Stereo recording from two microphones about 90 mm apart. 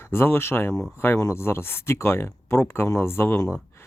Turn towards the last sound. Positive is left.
turn(degrees=30)  # may be behind; listen again after turning